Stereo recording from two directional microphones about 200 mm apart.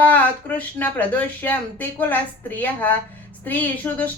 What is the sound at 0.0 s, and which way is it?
Speech, 10° left (ahead or behind).